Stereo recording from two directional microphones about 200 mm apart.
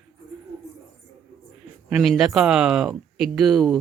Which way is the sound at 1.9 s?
5° right (ahead or behind).